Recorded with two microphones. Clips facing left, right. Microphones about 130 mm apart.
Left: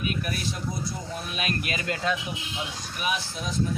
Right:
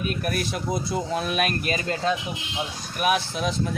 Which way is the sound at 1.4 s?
45° right (ahead or behind).